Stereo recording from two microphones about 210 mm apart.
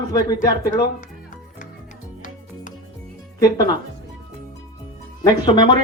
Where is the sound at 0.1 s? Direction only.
15° left (ahead or behind).